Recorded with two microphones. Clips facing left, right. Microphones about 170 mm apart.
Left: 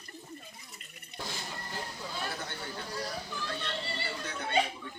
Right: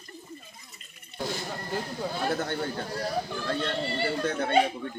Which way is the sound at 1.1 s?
15° left (ahead or behind).